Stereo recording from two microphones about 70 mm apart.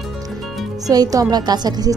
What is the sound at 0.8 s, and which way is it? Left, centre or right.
A woman's voice, right.